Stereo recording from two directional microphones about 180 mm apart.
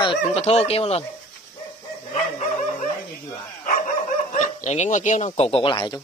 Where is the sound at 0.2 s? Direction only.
35° left (ahead or behind).